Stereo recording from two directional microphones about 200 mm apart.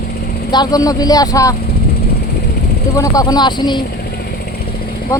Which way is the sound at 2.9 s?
15° left (ahead or behind).